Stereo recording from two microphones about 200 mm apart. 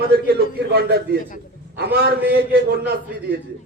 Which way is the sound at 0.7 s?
55° right (ahead or behind).